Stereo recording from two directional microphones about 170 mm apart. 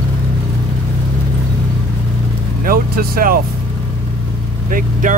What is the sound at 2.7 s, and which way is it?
Vehicle, 60° right (ahead or behind).